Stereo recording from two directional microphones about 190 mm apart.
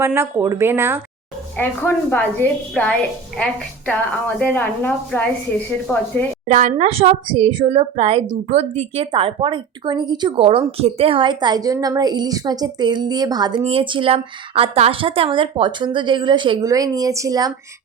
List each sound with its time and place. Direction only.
0.0 s speech: 10° right (ahead or behind)
1.6 s a woman's voice: 10° left (ahead or behind)
6.5 s a woman's voice: 40° right (ahead or behind); by 17.5 s 20° right (ahead or behind)